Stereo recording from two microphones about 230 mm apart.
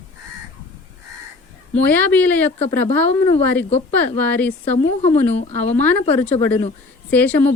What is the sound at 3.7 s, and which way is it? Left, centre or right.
Speech, left.